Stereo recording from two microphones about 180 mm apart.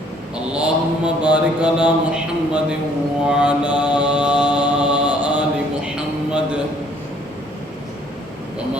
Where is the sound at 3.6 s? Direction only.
25° left (ahead or behind).